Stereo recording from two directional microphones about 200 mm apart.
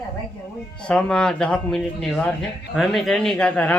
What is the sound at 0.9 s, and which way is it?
Speech, 5° left (ahead or behind).